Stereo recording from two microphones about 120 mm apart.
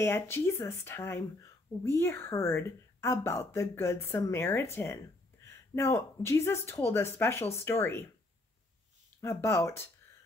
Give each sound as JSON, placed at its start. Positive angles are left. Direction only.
{"t": 0.0, "sound": "speech", "side_deg": 20}
{"t": 9.2, "sound": "speech", "side_deg": 25}